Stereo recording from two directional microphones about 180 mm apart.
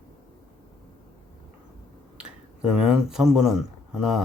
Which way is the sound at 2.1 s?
5° right (ahead or behind).